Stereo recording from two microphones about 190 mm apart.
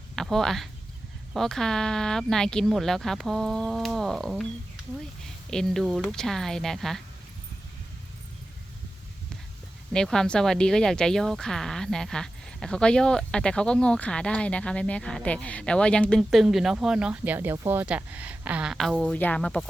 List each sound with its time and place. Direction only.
0.2 s speech: centre (ahead or behind)
9.9 s speech: 5° left (ahead or behind)